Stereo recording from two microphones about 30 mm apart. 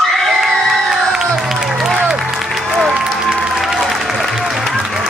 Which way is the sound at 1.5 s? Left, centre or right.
Centre.